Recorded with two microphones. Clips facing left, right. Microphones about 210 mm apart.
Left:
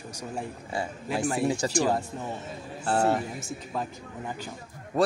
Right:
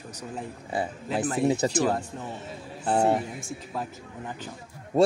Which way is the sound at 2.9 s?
20° right (ahead or behind).